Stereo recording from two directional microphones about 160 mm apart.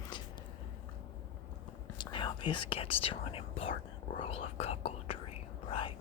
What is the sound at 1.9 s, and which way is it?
Speech, 30° left (ahead or behind).